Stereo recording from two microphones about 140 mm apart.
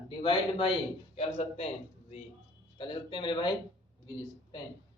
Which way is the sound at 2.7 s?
35° left (ahead or behind).